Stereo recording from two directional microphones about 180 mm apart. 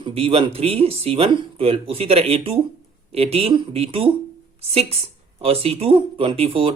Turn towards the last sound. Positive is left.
turn(degrees=-30)  # may be behind; listen again after turning